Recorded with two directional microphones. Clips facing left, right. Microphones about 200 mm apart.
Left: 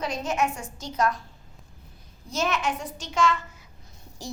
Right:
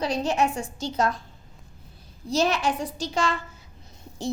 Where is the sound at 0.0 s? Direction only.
35° right (ahead or behind).